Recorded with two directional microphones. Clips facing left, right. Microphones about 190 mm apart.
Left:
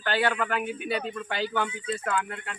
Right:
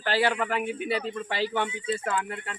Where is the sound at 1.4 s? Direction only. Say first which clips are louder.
Right 1 dB; 5° right (ahead or behind).